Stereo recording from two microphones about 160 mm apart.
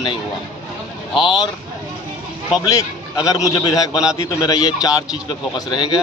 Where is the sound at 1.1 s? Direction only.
Centre (ahead or behind).